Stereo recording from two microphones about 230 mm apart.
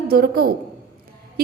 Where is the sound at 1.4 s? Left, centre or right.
Right.